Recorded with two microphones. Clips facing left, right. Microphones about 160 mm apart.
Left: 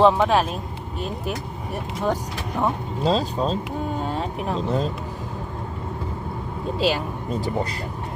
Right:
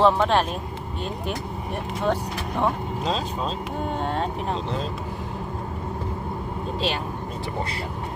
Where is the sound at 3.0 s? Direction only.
35° left (ahead or behind).